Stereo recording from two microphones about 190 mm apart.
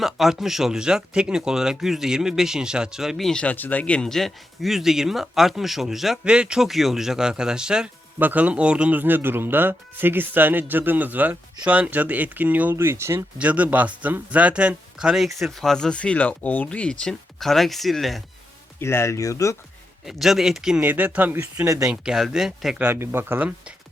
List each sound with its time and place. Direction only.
0.0 s speech: centre (ahead or behind)
18.8 s speech: 15° left (ahead or behind)
20.1 s speech: centre (ahead or behind)
21.8 s speech: 5° right (ahead or behind)